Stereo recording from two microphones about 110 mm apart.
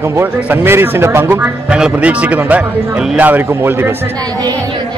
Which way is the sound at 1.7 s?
10° right (ahead or behind).